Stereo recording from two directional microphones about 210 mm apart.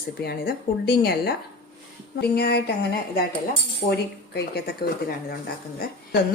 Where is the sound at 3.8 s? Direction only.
50° left (ahead or behind).